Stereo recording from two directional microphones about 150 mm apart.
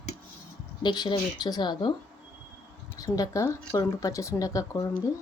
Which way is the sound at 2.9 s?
25° left (ahead or behind).